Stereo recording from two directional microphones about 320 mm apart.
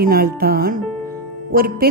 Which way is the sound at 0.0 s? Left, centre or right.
Right.